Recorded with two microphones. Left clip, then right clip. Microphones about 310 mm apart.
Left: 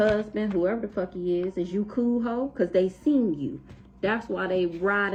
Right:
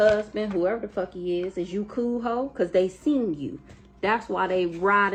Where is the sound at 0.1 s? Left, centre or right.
Centre.